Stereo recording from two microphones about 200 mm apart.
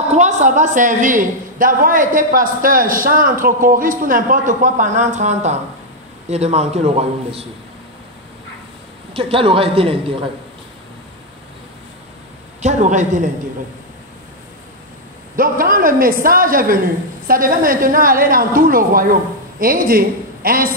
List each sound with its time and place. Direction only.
0.1 s a woman's voice: 35° right (ahead or behind)
9.1 s a woman's voice: 25° right (ahead or behind)
12.6 s a man's voice: 35° right (ahead or behind)
15.3 s a woman's voice: 45° right (ahead or behind)